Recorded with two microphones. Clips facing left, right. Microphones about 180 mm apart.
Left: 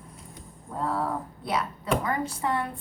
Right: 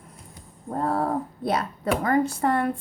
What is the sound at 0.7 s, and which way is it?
Speech, 55° right (ahead or behind).